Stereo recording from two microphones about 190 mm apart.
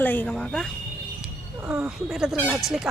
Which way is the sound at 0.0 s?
10° left (ahead or behind).